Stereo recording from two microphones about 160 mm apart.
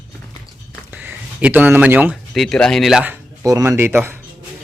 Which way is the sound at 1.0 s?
10° right (ahead or behind).